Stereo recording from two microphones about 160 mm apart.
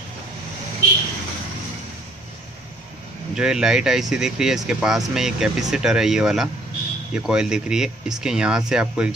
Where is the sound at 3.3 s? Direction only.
5° right (ahead or behind).